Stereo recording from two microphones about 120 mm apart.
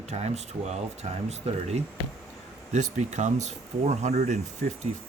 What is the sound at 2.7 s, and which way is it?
Speech, 90° right.